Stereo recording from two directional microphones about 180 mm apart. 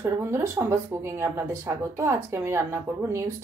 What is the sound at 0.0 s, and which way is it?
Speech, 15° right (ahead or behind).